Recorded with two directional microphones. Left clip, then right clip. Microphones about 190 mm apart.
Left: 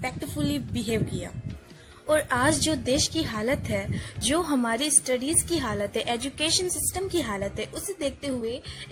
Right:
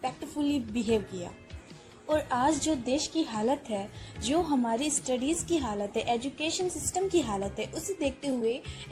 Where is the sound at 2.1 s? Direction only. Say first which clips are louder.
Left 4 dB; 25° left (ahead or behind).